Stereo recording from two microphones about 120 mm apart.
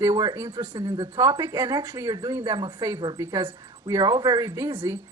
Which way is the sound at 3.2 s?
20° right (ahead or behind).